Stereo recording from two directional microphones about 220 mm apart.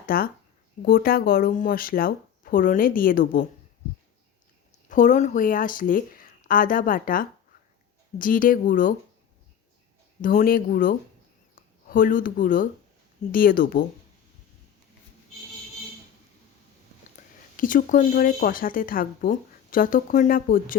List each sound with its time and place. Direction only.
0.0 s speech: 40° left (ahead or behind)
4.9 s speech: 35° left (ahead or behind)
10.2 s speech: 40° left (ahead or behind)
17.6 s speech: 40° left (ahead or behind)